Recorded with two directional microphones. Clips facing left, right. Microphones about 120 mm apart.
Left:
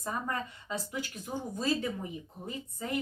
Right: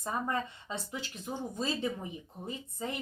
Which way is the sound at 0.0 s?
25° right (ahead or behind).